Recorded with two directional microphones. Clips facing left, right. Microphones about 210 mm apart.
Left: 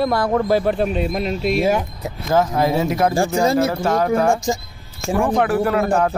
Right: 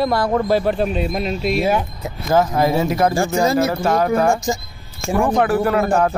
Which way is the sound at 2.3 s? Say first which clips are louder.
Right 1 dB; 5° right (ahead or behind).